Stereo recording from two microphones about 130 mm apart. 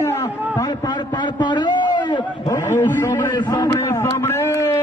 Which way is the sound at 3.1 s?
35° left (ahead or behind).